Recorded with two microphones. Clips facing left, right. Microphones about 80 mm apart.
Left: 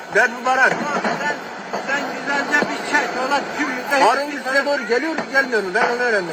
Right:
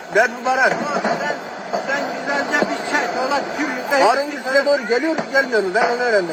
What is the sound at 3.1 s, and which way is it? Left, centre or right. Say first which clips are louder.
Speech: right 1 dB; centre.